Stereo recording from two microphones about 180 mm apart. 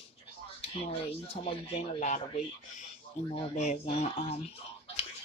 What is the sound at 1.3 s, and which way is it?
Speech, 35° left (ahead or behind).